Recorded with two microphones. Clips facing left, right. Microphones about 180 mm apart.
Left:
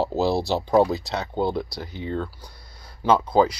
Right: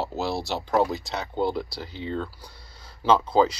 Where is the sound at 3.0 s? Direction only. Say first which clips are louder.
Left 1 dB; 10° left (ahead or behind).